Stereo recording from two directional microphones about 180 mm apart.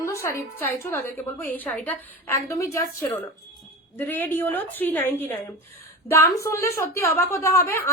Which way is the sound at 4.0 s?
10° left (ahead or behind).